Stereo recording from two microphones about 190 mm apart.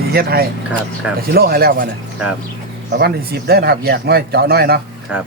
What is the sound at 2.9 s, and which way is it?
Speech, 55° right (ahead or behind).